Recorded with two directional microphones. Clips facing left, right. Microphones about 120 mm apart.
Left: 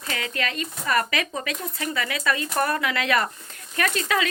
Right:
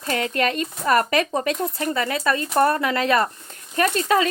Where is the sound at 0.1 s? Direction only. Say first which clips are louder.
Right 7 dB; 45° right (ahead or behind).